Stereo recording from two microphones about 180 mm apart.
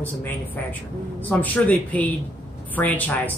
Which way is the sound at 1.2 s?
10° left (ahead or behind).